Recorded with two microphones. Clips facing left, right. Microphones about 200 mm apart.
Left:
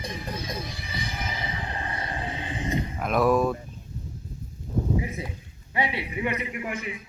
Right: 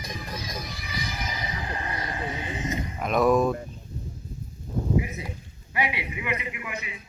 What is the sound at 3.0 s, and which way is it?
Speech, 5° left (ahead or behind).